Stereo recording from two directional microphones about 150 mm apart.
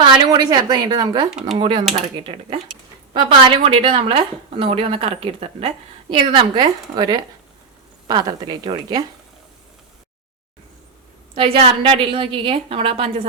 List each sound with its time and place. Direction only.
0.0 s a woman's voice: 25° right (ahead or behind)
1.3 s speech: 5° right (ahead or behind)
1.5 s speech: 30° right (ahead or behind)
3.7 s a woman's voice: 35° right (ahead or behind)
11.3 s speech: 40° right (ahead or behind)